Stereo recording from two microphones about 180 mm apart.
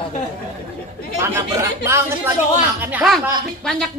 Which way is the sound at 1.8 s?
15° right (ahead or behind).